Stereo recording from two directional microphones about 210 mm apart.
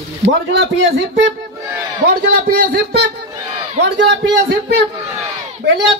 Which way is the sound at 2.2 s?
50° right (ahead or behind).